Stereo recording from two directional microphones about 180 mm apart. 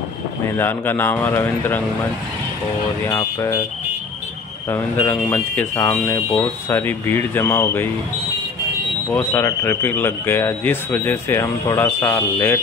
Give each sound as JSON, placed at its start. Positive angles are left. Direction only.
{"t": 0.6, "sound": "speech", "side_deg": 10}
{"t": 3.1, "sound": "speech", "side_deg": 15}
{"t": 4.6, "sound": "speech", "side_deg": 15}
{"t": 9.1, "sound": "speech", "side_deg": 10}